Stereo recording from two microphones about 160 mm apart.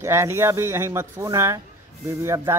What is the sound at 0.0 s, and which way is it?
Speech, 15° right (ahead or behind).